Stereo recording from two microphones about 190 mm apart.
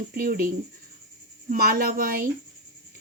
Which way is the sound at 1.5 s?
50° right (ahead or behind).